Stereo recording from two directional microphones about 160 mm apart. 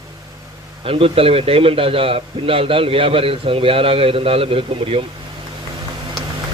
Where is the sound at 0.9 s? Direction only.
35° right (ahead or behind).